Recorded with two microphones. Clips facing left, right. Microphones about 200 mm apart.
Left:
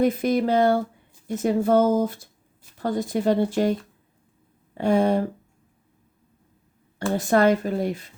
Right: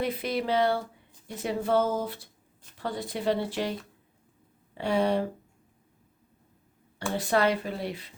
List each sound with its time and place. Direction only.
0.0 s speech: 45° left (ahead or behind)
7.2 s speech: 45° left (ahead or behind)